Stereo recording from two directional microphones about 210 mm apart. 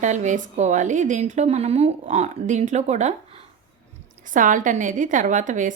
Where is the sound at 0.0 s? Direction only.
35° right (ahead or behind).